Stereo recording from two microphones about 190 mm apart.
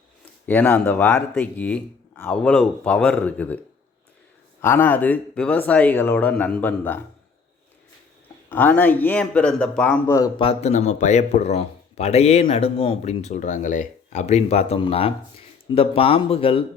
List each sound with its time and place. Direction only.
0.4 s speech: 10° left (ahead or behind)
4.6 s speech: 10° left (ahead or behind)
8.4 s speech: 10° left (ahead or behind)
10.4 s a man's voice: 35° left (ahead or behind)